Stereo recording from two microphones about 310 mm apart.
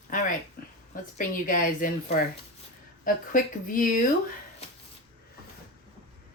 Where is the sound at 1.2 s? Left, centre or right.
Left.